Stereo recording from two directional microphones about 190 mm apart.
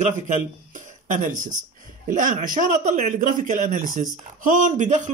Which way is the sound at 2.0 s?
45° right (ahead or behind).